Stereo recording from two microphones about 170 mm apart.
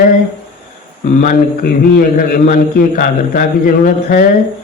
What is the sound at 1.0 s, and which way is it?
A man's voice, 55° left (ahead or behind).